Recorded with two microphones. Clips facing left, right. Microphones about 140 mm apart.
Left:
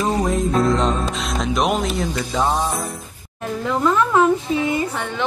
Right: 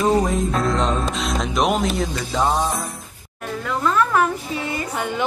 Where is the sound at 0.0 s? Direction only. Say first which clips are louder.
Right 1 dB; centre (ahead or behind).